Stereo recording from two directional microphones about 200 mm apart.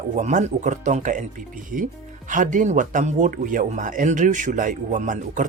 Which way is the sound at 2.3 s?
40° right (ahead or behind).